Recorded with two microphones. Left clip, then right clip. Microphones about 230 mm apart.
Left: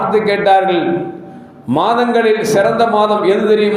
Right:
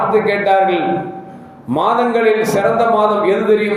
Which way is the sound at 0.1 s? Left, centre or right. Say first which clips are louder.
Left 5 dB; left.